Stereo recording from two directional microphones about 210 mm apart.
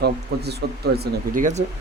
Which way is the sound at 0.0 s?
50° right (ahead or behind).